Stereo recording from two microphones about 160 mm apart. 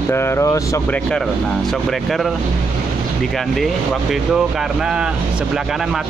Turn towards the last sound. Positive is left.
turn(degrees=-5)  # may be behind; listen again after turning